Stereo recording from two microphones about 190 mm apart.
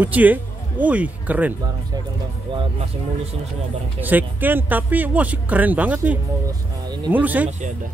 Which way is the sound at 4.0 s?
10° right (ahead or behind).